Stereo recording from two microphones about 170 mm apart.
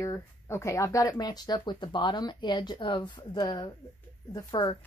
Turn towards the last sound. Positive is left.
turn(degrees=25)  # may be behind; listen again after turning